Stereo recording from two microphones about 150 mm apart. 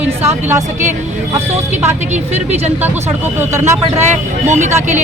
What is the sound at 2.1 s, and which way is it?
Speech, 50° right (ahead or behind).